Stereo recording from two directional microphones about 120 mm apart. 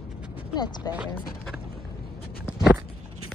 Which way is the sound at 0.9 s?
5° right (ahead or behind).